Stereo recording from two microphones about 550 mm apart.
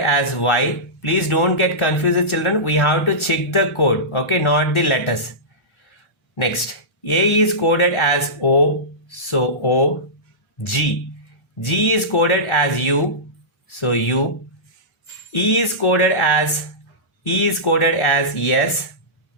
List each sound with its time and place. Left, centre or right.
0.0 s speech: left
6.3 s speech: left
15.3 s speech: left